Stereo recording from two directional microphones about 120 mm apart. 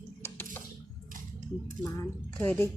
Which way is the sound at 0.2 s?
15° left (ahead or behind).